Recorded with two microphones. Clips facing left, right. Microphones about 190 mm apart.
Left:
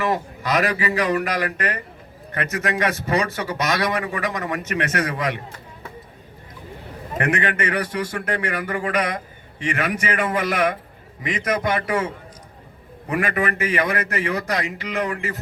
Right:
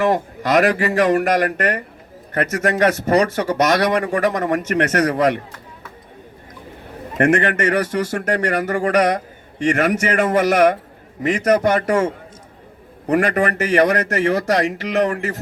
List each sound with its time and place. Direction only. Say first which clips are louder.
0.0 s speech: right 5 dB; 45° right (ahead or behind)
7.2 s speech: right 6 dB; 45° right (ahead or behind)